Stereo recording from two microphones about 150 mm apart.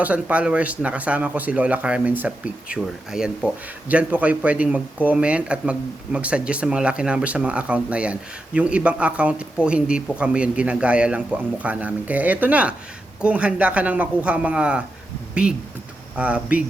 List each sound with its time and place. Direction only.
0.0 s speech: 10° right (ahead or behind)